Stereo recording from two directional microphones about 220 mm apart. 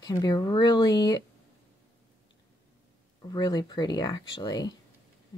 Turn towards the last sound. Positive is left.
turn(degrees=20)  # may be behind; listen again after turning